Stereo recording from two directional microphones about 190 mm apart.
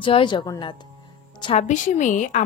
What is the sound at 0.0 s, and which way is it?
A woman's voice, 25° left (ahead or behind).